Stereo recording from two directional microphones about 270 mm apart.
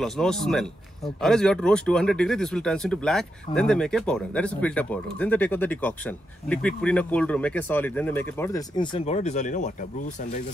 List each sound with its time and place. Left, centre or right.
0.0 s speech: centre; by 10.4 s left